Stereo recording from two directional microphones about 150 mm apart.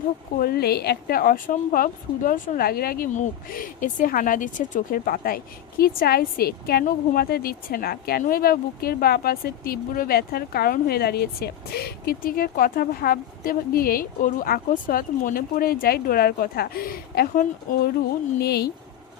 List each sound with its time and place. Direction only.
0.3 s a woman's voice: 90° left
3.2 s a woman's voice: 65° left (ahead or behind); by 18.7 s 90° left